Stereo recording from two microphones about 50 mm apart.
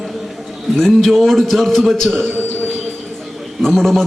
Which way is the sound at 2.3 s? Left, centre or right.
Right.